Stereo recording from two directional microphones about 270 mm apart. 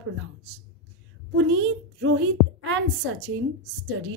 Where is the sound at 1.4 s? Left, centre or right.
Right.